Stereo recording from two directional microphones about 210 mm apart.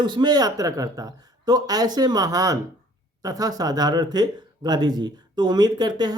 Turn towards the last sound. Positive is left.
turn(degrees=-20)  # may be behind; listen again after turning